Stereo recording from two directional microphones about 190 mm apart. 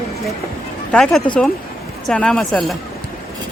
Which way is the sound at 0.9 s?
5° left (ahead or behind).